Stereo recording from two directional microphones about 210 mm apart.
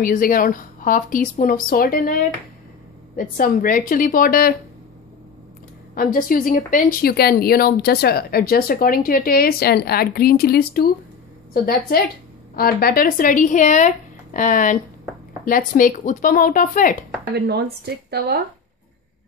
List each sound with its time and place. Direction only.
0.0 s speech: 40° left (ahead or behind)
5.9 s speech: 40° left (ahead or behind)
17.3 s speech: 50° right (ahead or behind)